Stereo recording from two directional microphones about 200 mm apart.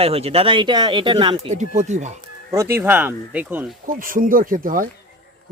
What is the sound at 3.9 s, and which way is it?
Speech, 45° right (ahead or behind).